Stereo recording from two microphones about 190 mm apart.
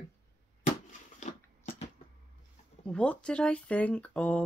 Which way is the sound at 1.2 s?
40° left (ahead or behind).